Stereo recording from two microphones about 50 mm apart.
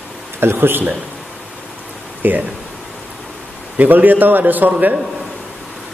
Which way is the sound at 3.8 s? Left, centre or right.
Right.